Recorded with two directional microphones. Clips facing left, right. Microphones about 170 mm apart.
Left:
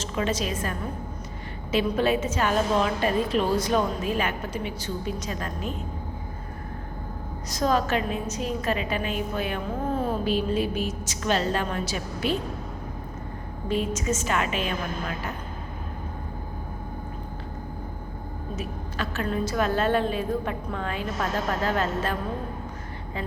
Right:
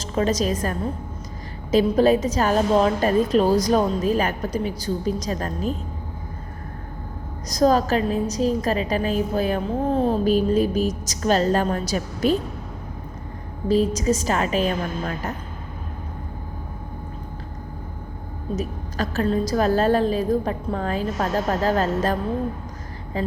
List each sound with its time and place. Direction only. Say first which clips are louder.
0.0 s a woman's voice: right 5 dB; 40° right (ahead or behind)
7.5 s a woman's voice: right 6 dB; 40° right (ahead or behind)
13.7 s a woman's voice: right 7 dB; 35° right (ahead or behind)
18.5 s a woman's voice: right 6 dB; 40° right (ahead or behind)